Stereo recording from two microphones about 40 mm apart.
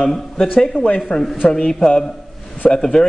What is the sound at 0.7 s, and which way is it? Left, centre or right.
Speech, left.